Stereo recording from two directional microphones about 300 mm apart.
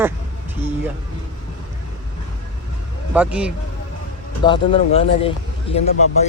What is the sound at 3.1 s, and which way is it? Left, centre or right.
Speech, centre.